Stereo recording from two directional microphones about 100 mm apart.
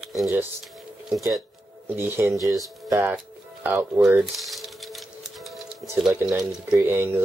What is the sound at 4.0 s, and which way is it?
Speech, 20° right (ahead or behind).